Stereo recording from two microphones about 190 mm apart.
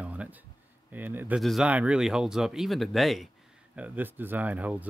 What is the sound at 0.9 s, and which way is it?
Speech, 10° right (ahead or behind).